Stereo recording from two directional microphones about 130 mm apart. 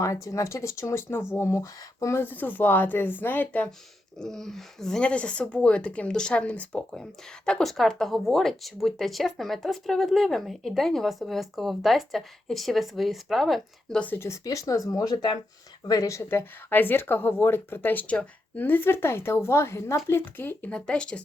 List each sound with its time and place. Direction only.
0.0 s a woman's voice: 25° left (ahead or behind); by 14.0 s centre (ahead or behind)
14.0 s a woman's voice: 15° left (ahead or behind)